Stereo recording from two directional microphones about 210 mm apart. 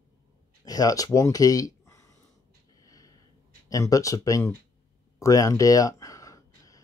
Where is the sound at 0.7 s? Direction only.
15° left (ahead or behind).